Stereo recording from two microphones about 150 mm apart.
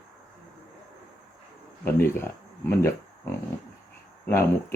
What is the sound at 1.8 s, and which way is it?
Speech, 15° left (ahead or behind).